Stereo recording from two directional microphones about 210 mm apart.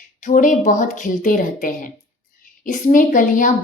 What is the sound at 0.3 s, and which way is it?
A woman's voice, 35° left (ahead or behind).